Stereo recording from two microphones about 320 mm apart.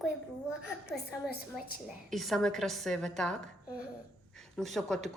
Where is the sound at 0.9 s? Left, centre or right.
Left.